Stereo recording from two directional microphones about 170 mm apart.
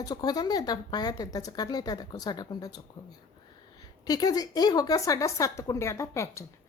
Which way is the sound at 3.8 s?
20° left (ahead or behind).